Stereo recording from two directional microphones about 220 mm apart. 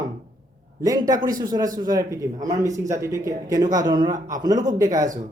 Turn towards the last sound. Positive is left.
turn(degrees=-15)  # may be behind; listen again after turning